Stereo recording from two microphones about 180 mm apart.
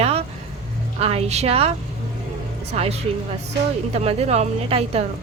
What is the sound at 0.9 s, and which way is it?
Speech, 35° right (ahead or behind).